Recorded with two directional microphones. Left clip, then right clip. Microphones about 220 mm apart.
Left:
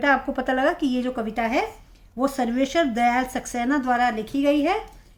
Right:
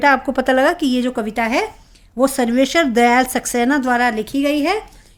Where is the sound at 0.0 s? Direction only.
50° right (ahead or behind).